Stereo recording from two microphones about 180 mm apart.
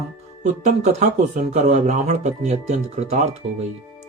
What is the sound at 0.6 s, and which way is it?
Speech, 40° right (ahead or behind).